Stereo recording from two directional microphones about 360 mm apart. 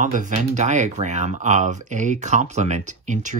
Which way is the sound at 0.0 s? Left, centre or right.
Right.